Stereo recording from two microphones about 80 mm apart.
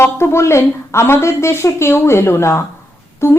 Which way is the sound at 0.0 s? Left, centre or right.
Left.